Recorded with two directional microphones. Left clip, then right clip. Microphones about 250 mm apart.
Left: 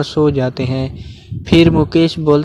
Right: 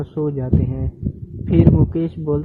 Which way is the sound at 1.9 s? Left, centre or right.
Left.